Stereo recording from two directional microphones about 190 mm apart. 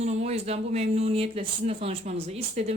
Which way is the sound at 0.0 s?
35° right (ahead or behind).